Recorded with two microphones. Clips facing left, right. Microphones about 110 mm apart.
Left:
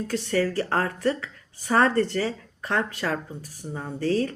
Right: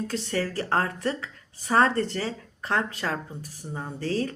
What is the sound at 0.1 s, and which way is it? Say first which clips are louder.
A woman's voice: left 4 dB; 30° right (ahead or behind).